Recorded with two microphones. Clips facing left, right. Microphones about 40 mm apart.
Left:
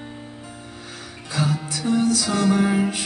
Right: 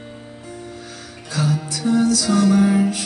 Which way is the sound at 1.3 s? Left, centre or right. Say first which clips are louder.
Right 2 dB; left.